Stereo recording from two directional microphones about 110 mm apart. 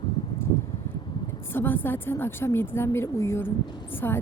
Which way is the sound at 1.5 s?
20° left (ahead or behind).